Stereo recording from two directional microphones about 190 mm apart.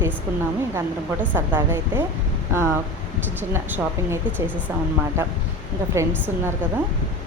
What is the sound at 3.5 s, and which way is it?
Speech, 10° right (ahead or behind).